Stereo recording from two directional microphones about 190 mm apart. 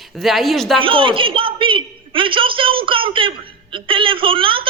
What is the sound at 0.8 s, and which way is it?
A woman's voice, 25° right (ahead or behind).